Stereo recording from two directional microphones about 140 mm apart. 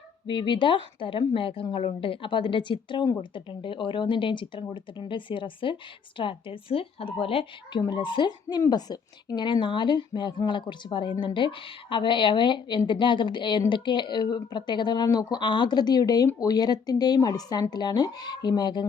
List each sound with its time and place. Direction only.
0.3 s speech: 35° left (ahead or behind)